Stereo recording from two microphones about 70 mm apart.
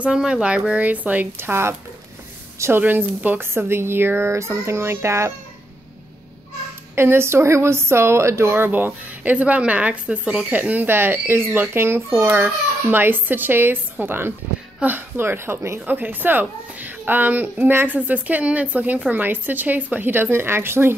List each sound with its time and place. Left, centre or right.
0.0 s speech: centre
1.3 s a woman's voice: right
2.8 s a woman's voice: right
7.0 s a woman's voice: right
15.8 s a woman's voice: right